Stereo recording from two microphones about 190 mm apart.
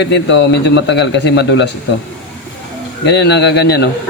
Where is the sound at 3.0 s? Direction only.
65° left (ahead or behind).